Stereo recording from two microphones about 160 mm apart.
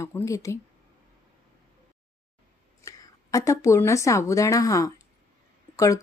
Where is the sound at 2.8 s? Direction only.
20° left (ahead or behind).